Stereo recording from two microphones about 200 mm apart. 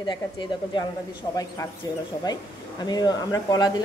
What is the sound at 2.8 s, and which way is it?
A woman's voice, 20° left (ahead or behind).